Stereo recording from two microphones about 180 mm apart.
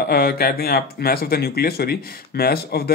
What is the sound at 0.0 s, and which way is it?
Speech, 60° left (ahead or behind).